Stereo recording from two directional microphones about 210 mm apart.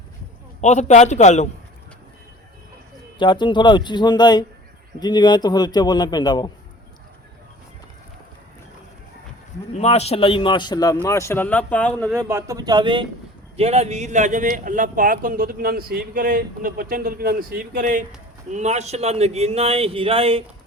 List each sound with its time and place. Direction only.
0.6 s a man's voice: 35° left (ahead or behind)
3.2 s a man's voice: 20° left (ahead or behind)
9.7 s a man's voice: 30° left (ahead or behind); by 12.1 s 5° left (ahead or behind)
12.1 s a man's voice: 15° right (ahead or behind)